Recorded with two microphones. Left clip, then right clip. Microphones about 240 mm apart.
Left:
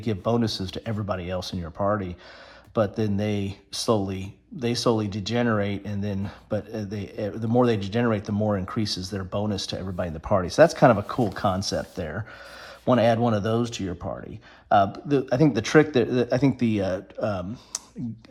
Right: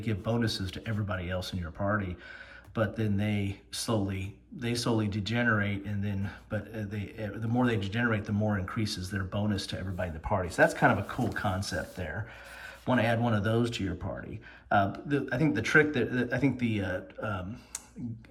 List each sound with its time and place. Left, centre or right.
0.0 s speech: centre